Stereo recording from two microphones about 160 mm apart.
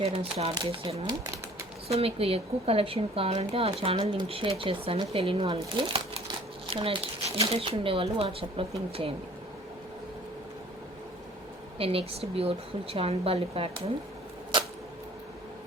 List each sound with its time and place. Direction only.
0.0 s speech: 35° right (ahead or behind)
11.8 s speech: 35° right (ahead or behind)